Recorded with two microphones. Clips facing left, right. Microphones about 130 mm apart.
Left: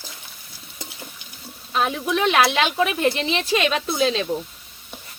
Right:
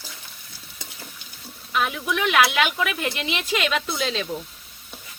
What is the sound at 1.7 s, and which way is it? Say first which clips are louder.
Speech: left 3 dB; 30° left (ahead or behind).